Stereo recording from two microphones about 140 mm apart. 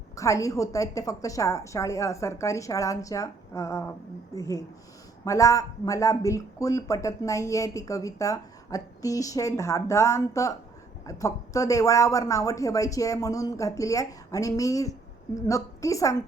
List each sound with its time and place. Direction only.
0.2 s speech: 20° left (ahead or behind)